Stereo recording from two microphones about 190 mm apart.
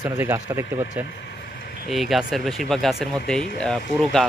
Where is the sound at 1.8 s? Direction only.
Centre (ahead or behind).